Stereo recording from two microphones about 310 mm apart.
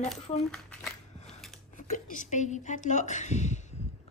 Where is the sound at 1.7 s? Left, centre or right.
Left.